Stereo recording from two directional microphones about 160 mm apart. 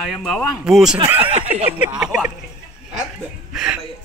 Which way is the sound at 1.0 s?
10° right (ahead or behind).